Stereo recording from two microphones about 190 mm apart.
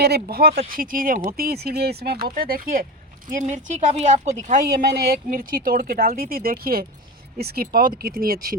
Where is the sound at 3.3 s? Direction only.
40° right (ahead or behind).